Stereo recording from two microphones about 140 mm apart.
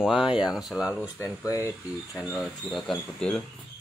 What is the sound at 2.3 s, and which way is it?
Speech, 5° left (ahead or behind).